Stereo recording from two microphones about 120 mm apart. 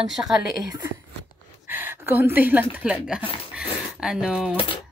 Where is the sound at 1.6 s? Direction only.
20° right (ahead or behind).